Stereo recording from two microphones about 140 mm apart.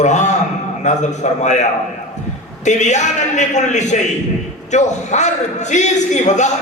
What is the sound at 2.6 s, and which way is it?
A man's voice, 55° left (ahead or behind).